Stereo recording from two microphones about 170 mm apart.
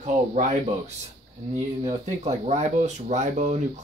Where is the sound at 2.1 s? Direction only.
40° right (ahead or behind).